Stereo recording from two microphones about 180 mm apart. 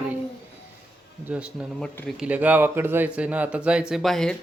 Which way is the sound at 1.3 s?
5° right (ahead or behind).